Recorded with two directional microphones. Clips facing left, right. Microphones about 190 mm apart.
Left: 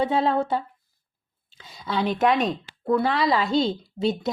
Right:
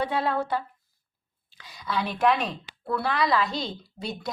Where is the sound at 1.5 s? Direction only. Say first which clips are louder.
Left 3 dB; 25° left (ahead or behind).